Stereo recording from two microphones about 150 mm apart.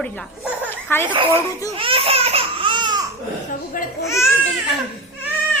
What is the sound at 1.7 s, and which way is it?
Baby cry, 40° right (ahead or behind).